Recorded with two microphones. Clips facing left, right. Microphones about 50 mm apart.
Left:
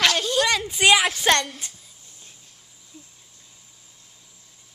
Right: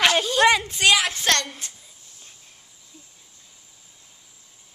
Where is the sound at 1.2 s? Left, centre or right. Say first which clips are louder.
Left 3 dB; centre.